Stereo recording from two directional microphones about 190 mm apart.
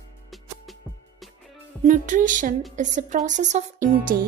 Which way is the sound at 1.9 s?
40° right (ahead or behind).